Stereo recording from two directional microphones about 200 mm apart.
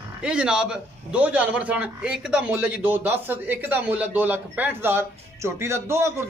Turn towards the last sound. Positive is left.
turn(degrees=-15)  # may be behind; listen again after turning